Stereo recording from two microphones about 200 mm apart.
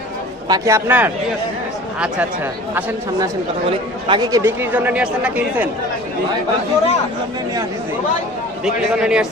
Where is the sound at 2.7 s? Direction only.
10° right (ahead or behind).